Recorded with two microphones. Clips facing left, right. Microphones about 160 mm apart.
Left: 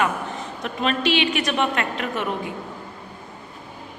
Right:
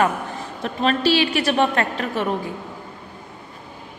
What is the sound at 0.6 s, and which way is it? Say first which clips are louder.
A woman's voice: right 3 dB; 35° right (ahead or behind).